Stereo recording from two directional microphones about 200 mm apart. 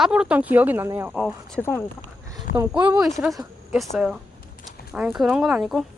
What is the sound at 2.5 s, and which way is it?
Speech, 45° left (ahead or behind).